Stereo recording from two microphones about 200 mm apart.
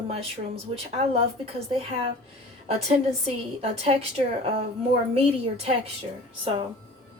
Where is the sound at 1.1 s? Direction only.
30° right (ahead or behind).